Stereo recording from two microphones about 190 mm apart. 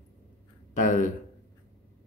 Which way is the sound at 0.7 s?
40° left (ahead or behind).